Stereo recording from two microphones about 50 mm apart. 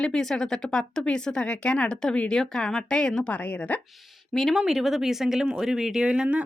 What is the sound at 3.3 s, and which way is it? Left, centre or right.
Speech, left.